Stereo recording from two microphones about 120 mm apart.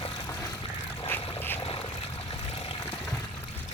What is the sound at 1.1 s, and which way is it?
Vehicle, 15° left (ahead or behind).